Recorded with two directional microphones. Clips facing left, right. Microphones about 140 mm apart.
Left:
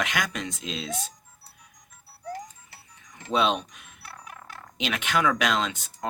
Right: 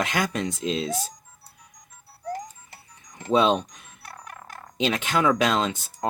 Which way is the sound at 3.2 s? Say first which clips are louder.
Right 4 dB; 35° right (ahead or behind).